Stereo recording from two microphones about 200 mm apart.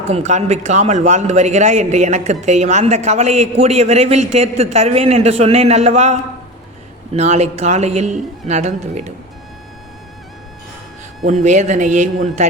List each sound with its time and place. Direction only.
0.1 s a man's voice: 35° right (ahead or behind)
11.2 s a man's voice: 40° right (ahead or behind)